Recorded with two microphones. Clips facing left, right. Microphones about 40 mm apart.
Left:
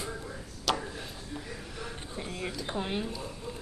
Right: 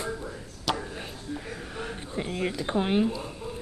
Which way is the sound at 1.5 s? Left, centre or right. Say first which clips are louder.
Right 5 dB; right.